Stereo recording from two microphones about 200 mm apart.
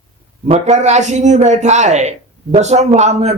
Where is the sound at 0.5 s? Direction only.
35° right (ahead or behind).